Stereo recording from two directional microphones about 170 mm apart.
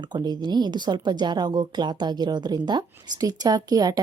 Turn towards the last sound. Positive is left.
turn(degrees=-20)  # may be behind; listen again after turning